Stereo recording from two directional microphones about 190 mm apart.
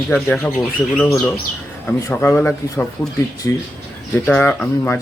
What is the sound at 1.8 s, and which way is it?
Speech, 10° left (ahead or behind).